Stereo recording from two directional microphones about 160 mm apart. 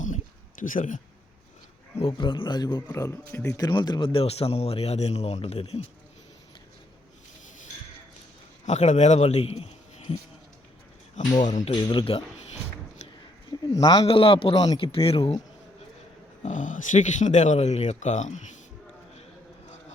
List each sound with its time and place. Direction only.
0.6 s speech: 55° left (ahead or behind)
2.0 s a man's voice: 30° left (ahead or behind)
8.6 s a man's voice: 45° left (ahead or behind)
11.3 s speech: 50° left (ahead or behind)
11.7 s a man's voice: 30° left (ahead or behind)
13.7 s a man's voice: 25° left (ahead or behind)
14.1 s speech: 35° left (ahead or behind)
16.4 s speech: 50° left (ahead or behind)